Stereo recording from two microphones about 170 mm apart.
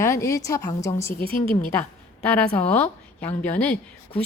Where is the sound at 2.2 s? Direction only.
10° left (ahead or behind).